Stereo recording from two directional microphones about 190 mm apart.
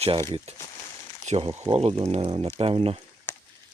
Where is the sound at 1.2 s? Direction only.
35° right (ahead or behind).